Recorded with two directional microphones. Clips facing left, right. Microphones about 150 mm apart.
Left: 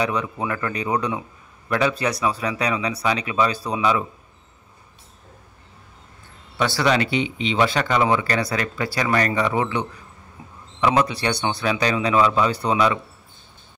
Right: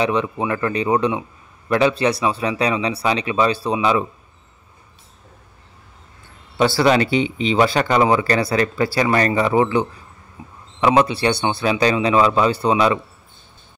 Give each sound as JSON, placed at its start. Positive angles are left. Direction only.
{"t": 0.0, "sound": "speech", "side_deg": -25}
{"t": 6.6, "sound": "speech", "side_deg": -30}